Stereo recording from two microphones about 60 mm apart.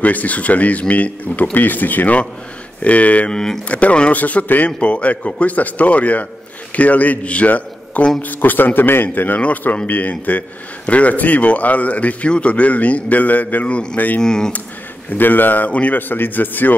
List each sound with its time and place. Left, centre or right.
0.0 s a man's voice: left
14.2 s speech: centre
15.1 s speech: left